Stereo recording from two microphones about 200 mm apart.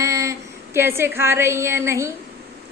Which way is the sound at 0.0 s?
15° right (ahead or behind).